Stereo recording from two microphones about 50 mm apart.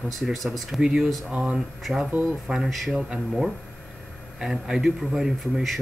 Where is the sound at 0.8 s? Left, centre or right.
Centre.